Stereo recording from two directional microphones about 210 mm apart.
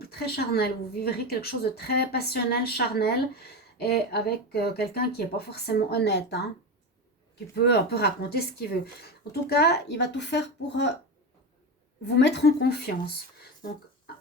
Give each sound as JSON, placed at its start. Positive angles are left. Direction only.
{"t": 0.1, "sound": "a woman's voice", "side_deg": 50}
{"t": 7.6, "sound": "a woman's voice", "side_deg": 50}
{"t": 12.0, "sound": "a woman's voice", "side_deg": 55}